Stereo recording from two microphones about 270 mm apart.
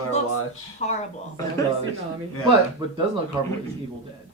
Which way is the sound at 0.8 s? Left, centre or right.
Left.